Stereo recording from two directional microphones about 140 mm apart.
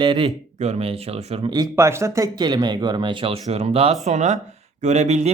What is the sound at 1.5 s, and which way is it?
Speech, 25° right (ahead or behind).